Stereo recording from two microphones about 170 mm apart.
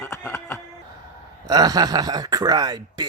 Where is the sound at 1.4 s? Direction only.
20° right (ahead or behind).